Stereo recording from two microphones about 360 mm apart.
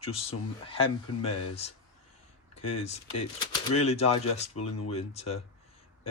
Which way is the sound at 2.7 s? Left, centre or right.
Centre.